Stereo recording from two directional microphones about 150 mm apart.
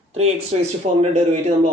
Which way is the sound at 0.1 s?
45° right (ahead or behind).